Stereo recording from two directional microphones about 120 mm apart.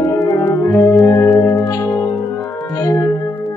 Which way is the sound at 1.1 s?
25° left (ahead or behind).